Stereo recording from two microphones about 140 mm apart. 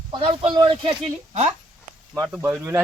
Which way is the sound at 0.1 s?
40° right (ahead or behind).